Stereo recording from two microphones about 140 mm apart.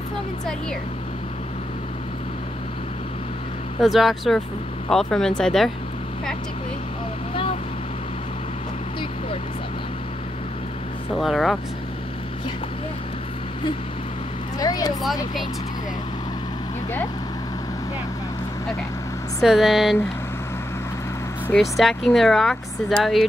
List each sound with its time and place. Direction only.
3.8 s speech: centre (ahead or behind)
11.1 s speech: centre (ahead or behind)
14.6 s speech: 25° left (ahead or behind)
19.4 s speech: centre (ahead or behind)
21.5 s speech: centre (ahead or behind)